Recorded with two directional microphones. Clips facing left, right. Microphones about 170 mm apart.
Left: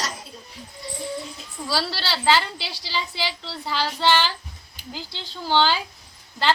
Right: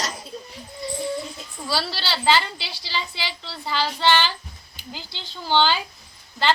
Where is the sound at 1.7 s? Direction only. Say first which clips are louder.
Even; 5° left (ahead or behind).